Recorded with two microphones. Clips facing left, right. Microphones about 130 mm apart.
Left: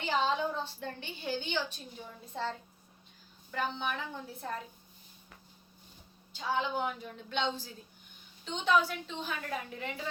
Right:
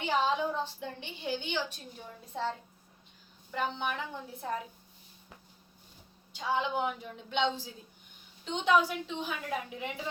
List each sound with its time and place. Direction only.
0.0 s a woman's voice: 10° right (ahead or behind)
6.3 s a woman's voice: 15° right (ahead or behind)